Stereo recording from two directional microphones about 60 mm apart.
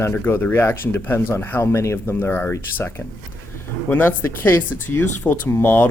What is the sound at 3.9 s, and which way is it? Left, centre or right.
Speech, left.